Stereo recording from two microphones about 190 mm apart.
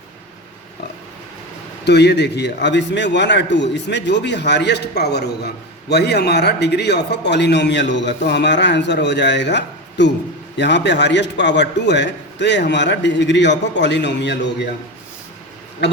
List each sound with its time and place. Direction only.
1.8 s a man's voice: 60° left (ahead or behind)
15.8 s a man's voice: 65° left (ahead or behind)